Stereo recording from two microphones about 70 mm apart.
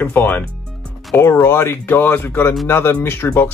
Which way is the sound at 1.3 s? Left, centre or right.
Left.